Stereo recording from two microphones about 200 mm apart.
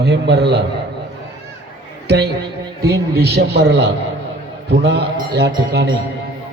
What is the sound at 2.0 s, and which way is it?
A man's voice, 55° right (ahead or behind).